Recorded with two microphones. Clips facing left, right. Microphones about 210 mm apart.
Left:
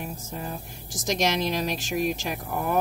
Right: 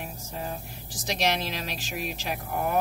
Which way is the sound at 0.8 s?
45° left (ahead or behind).